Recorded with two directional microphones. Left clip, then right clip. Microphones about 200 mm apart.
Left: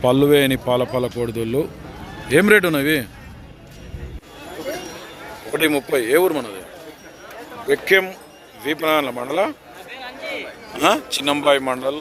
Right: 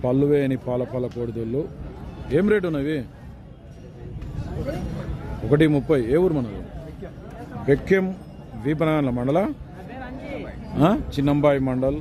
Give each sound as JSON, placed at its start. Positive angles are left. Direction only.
{"t": 0.1, "sound": "a man's voice", "side_deg": 0}
{"t": 5.5, "sound": "a man's voice", "side_deg": 5}
{"t": 7.7, "sound": "a man's voice", "side_deg": -5}
{"t": 10.0, "sound": "a sound", "side_deg": -35}
{"t": 10.8, "sound": "a man's voice", "side_deg": 0}